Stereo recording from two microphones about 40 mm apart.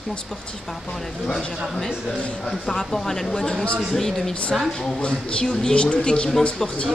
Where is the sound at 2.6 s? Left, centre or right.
Centre.